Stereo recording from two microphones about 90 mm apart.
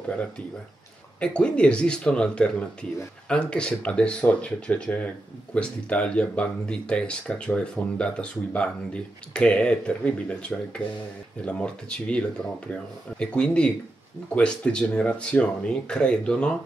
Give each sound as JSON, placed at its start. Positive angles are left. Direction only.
{"t": 1.2, "sound": "speech", "side_deg": 10}